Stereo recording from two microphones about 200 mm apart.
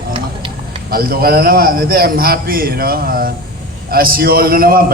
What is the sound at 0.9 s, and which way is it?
A man's voice, 50° right (ahead or behind).